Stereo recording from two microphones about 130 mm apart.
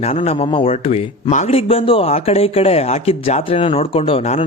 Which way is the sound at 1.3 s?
70° left (ahead or behind).